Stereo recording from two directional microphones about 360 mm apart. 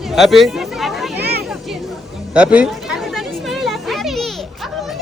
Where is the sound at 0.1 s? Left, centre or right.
Centre.